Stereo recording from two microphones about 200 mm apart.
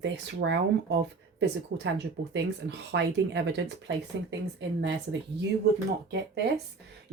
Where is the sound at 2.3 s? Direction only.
60° right (ahead or behind).